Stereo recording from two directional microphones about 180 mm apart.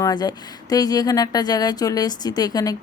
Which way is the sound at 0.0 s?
20° left (ahead or behind).